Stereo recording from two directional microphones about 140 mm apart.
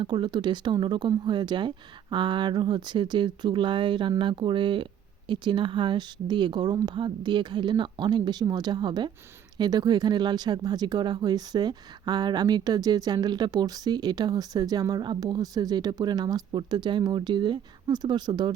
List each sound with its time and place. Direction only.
0.0 s speech: 35° right (ahead or behind)